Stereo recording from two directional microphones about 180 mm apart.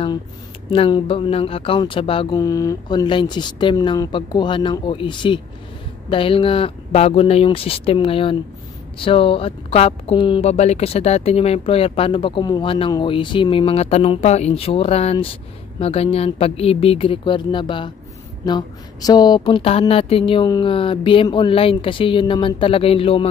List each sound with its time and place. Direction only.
0.7 s speech: 30° left (ahead or behind)